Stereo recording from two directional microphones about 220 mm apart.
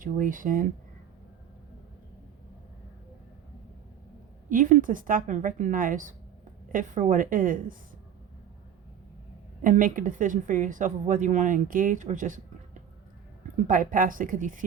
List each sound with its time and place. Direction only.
0.0 s a woman's voice: 35° right (ahead or behind)
4.4 s a woman's voice: 35° right (ahead or behind)
9.6 s a woman's voice: 35° right (ahead or behind)
13.7 s a woman's voice: 40° right (ahead or behind)